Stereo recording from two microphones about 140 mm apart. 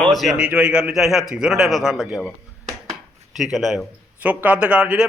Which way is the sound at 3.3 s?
Centre (ahead or behind).